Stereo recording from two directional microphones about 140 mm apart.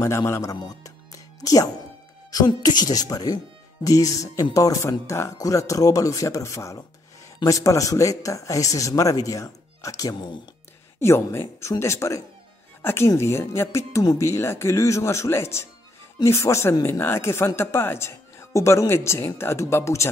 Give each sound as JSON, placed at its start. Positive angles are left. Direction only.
{"t": 0.0, "sound": "speech", "side_deg": 20}
{"t": 11.0, "sound": "speech", "side_deg": 20}